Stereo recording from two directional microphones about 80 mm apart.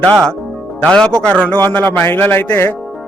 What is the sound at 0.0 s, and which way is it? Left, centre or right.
A man's voice, centre.